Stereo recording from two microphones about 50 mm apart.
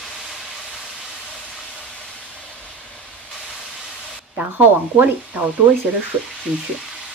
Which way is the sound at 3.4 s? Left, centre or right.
Centre.